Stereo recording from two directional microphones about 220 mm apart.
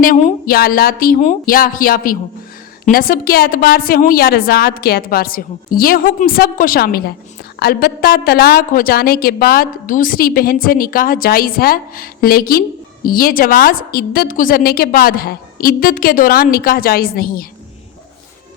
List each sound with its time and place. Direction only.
0.0 s a woman's voice: 40° left (ahead or behind)